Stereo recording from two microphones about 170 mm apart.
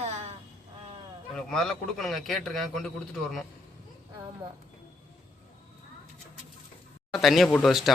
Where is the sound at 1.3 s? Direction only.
5° left (ahead or behind).